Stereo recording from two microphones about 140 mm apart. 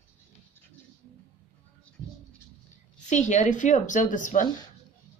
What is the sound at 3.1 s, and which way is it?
Speech, 60° left (ahead or behind).